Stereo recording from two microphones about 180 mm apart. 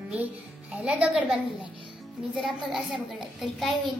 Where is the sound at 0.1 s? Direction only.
5° right (ahead or behind).